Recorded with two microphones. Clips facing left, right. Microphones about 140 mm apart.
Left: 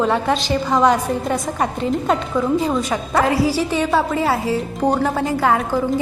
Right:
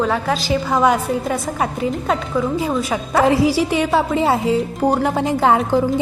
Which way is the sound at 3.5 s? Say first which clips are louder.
Right 2 dB; 10° right (ahead or behind).